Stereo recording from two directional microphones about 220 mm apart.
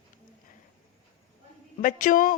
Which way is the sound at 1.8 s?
35° left (ahead or behind).